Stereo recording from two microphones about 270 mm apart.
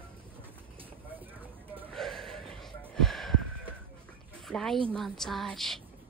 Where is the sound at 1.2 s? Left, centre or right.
Centre.